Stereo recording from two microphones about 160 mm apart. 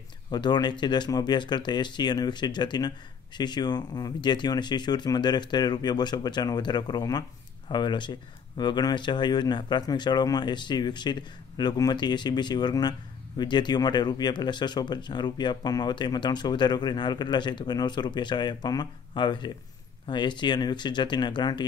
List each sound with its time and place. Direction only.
0.3 s speech: 25° left (ahead or behind)